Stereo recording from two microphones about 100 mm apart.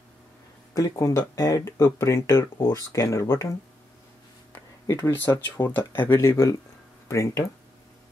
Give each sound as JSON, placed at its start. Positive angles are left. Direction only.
{"t": 0.7, "sound": "speech", "side_deg": 35}
{"t": 4.5, "sound": "a sound", "side_deg": 30}
{"t": 5.1, "sound": "speech", "side_deg": 20}